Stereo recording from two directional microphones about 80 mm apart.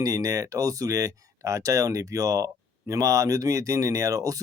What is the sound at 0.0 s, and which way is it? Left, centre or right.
Speech, right.